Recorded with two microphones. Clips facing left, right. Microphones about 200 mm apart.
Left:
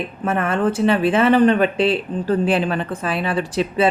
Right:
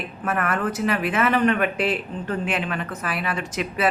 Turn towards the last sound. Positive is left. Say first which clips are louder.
# left 6 dB
turn(degrees=30)  # may be behind; listen again after turning